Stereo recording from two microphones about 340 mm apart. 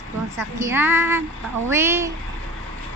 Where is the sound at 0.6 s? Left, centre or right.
Centre.